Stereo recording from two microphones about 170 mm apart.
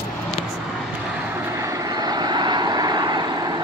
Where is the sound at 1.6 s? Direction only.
20° right (ahead or behind).